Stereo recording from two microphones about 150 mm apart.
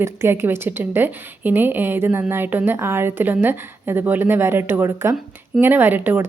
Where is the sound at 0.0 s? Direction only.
15° right (ahead or behind).